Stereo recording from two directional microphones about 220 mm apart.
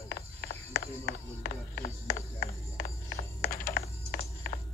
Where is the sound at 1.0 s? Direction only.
40° left (ahead or behind).